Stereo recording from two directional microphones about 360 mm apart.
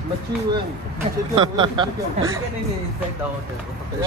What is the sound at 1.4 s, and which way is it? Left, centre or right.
Speech, centre.